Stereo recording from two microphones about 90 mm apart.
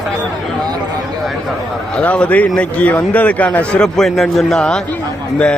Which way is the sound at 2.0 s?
15° left (ahead or behind).